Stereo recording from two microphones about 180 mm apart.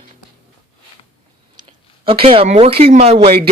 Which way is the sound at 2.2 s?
30° right (ahead or behind).